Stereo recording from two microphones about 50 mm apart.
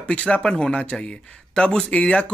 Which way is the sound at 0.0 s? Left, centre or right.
Left.